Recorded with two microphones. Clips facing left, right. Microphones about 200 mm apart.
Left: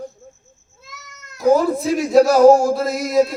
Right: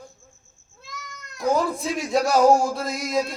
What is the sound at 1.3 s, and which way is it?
Speech, centre (ahead or behind).